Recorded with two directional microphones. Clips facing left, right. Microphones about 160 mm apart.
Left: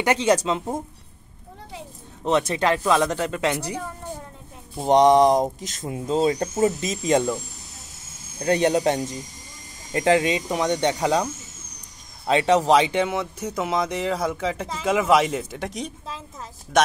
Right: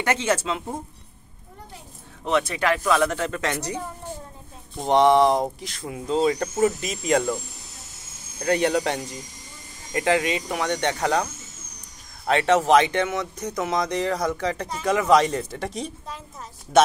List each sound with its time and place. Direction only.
0.0 s speech: 15° left (ahead or behind)
2.2 s speech: 25° left (ahead or behind)
4.8 s speech: 20° left (ahead or behind)
6.0 s speech: 40° left (ahead or behind)
6.3 s speech: 25° left (ahead or behind)
8.4 s speech: 20° left (ahead or behind)
12.3 s speech: 15° left (ahead or behind); by 15.9 s centre (ahead or behind)